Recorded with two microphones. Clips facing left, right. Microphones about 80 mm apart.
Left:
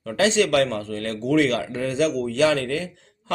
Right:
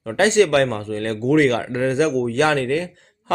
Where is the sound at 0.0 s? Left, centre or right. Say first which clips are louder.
Right 4 dB; right.